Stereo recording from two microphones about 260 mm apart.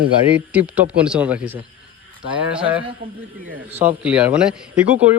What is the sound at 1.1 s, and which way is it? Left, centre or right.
Speech, centre.